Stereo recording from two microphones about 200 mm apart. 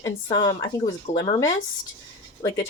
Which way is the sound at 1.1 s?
40° left (ahead or behind).